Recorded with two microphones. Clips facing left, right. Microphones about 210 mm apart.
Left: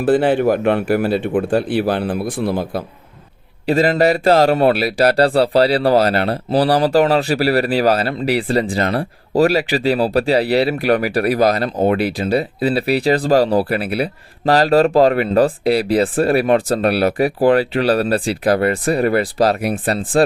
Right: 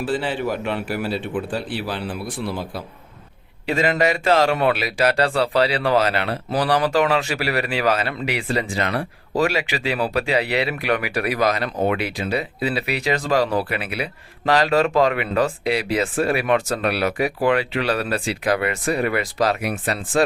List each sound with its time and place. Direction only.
0.0 s speech: 55° left (ahead or behind)
3.7 s a man's voice: 35° left (ahead or behind)